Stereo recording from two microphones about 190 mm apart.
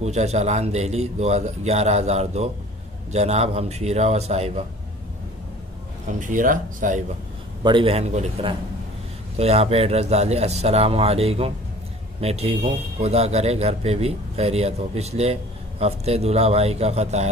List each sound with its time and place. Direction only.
0.0 s a man's voice: 35° right (ahead or behind)
6.0 s speech: 40° right (ahead or behind)
7.6 s a man's voice: 25° right (ahead or behind)